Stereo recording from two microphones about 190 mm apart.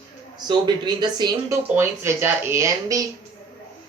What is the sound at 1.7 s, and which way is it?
Speech, 10° right (ahead or behind).